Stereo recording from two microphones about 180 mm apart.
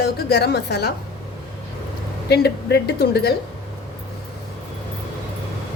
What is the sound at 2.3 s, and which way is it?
A woman's voice, 65° left (ahead or behind).